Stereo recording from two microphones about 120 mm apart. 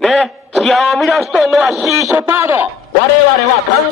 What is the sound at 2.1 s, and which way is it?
Speech, 20° right (ahead or behind).